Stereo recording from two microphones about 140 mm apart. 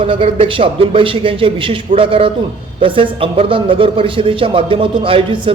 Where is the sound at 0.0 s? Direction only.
40° right (ahead or behind).